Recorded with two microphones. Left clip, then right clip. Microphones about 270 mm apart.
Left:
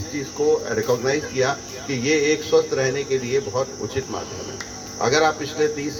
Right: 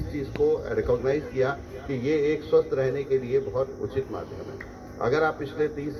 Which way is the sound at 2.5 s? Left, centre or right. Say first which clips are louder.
Left 3 dB; left.